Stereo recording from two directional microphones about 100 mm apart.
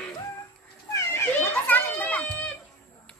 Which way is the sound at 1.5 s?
15° left (ahead or behind).